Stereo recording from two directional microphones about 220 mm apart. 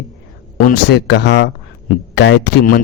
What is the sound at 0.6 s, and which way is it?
Speech, 45° left (ahead or behind).